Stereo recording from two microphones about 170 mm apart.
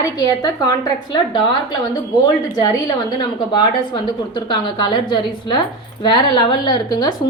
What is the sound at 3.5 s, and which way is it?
A woman's voice, 25° left (ahead or behind).